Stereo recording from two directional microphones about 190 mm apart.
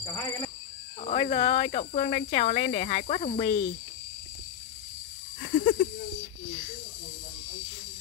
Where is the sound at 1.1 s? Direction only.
35° left (ahead or behind).